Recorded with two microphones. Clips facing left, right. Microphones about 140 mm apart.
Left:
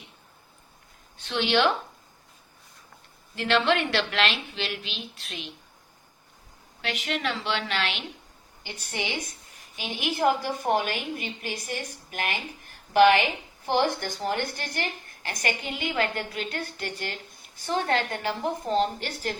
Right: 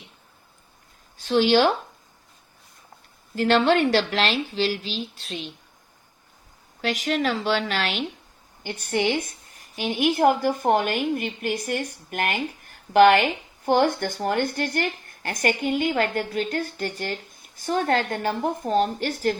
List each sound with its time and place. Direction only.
1.2 s a woman's voice: 40° right (ahead or behind)
3.3 s a woman's voice: 40° right (ahead or behind)
6.8 s a woman's voice: 40° right (ahead or behind)
8.6 s speech: 55° right (ahead or behind)